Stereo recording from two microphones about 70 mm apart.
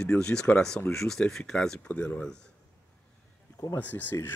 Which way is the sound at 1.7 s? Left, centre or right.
Left.